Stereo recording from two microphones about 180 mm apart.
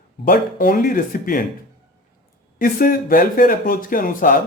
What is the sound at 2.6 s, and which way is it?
Speech, 50° left (ahead or behind).